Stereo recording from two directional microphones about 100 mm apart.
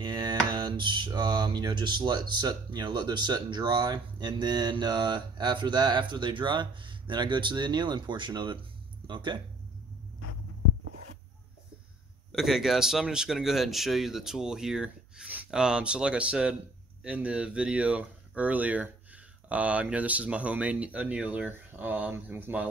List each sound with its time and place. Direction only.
0.0 s speech: 45° right (ahead or behind)
12.3 s speech: 5° right (ahead or behind)